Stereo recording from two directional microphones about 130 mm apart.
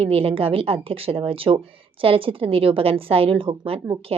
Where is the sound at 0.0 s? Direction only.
45° right (ahead or behind).